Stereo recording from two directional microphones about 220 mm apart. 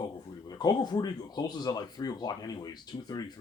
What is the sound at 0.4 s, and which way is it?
Speech, 20° left (ahead or behind).